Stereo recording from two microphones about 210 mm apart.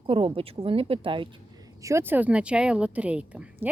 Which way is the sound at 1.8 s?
10° right (ahead or behind).